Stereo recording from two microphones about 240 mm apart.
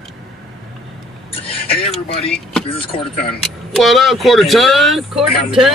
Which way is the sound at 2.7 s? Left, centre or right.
Left.